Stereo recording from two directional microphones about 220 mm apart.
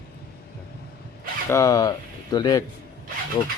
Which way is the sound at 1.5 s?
15° left (ahead or behind).